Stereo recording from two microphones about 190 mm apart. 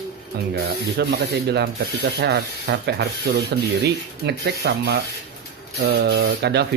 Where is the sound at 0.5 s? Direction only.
60° right (ahead or behind).